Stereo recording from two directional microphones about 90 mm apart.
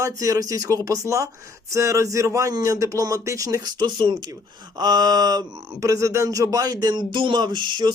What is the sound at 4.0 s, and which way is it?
Speech, 60° right (ahead or behind).